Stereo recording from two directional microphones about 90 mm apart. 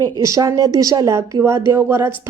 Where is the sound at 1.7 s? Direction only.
25° right (ahead or behind).